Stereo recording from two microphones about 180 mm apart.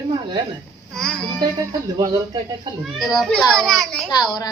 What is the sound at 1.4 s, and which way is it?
Speech, 25° right (ahead or behind).